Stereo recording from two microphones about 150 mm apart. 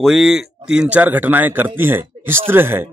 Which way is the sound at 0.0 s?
5° right (ahead or behind).